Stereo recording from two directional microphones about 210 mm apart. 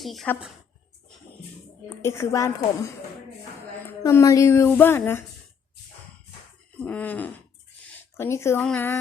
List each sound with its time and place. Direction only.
0.0 s a woman's voice: centre (ahead or behind)
2.0 s a woman's voice: 15° left (ahead or behind)
3.8 s a woman's voice: 15° left (ahead or behind)
6.7 s a woman's voice: 5° left (ahead or behind)